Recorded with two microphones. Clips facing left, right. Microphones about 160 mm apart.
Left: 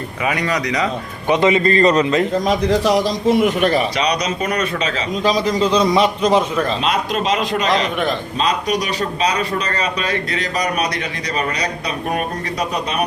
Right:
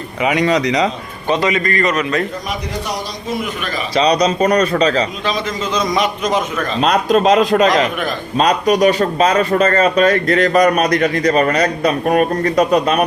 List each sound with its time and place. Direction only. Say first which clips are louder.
0.2 s speech: right 6 dB; 20° right (ahead or behind)
1.3 s a man's voice: left 2 dB; 25° left (ahead or behind)
2.8 s a man's voice: left 9 dB; 85° left; by 3.8 s 70° left (ahead or behind)
3.9 s speech: right 6 dB; 30° right (ahead or behind)
5.2 s a man's voice: left 4 dB; 35° left (ahead or behind)
6.8 s speech: right 6 dB; 45° right (ahead or behind)